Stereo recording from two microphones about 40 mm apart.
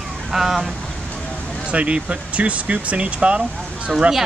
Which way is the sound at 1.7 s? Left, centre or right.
Right.